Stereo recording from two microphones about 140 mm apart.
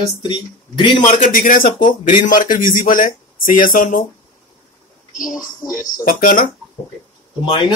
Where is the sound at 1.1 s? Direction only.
70° left (ahead or behind).